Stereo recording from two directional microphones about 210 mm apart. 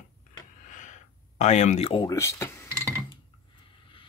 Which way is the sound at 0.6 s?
35° left (ahead or behind).